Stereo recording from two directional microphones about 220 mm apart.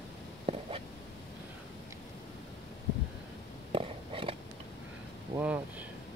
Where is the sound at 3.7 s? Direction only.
25° right (ahead or behind).